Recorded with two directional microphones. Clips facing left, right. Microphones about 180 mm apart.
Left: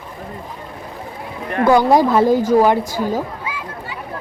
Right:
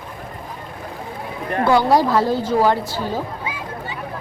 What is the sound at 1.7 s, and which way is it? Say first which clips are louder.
Speech: left 3 dB; 20° left (ahead or behind).